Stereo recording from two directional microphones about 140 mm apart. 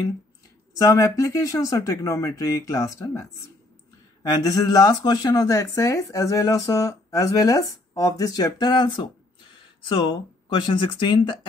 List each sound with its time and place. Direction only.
0.7 s speech: 20° left (ahead or behind)